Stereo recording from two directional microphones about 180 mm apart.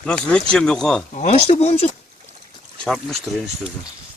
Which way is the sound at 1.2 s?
40° left (ahead or behind).